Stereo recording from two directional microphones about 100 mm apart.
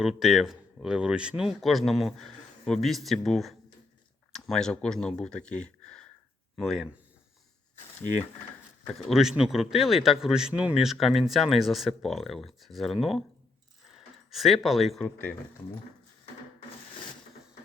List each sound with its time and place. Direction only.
0.0 s speech: 5° right (ahead or behind)
8.9 s speech: centre (ahead or behind)
13.9 s a sound: centre (ahead or behind)
15.0 s speech: 20° left (ahead or behind)